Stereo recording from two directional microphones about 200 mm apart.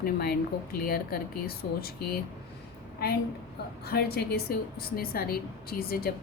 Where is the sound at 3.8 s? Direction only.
50° left (ahead or behind).